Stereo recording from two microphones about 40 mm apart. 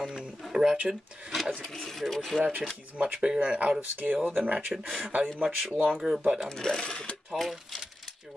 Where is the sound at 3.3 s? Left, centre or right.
Right.